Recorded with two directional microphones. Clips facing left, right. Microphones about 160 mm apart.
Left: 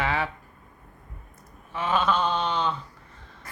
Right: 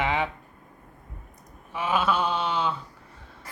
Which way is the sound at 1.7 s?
10° right (ahead or behind).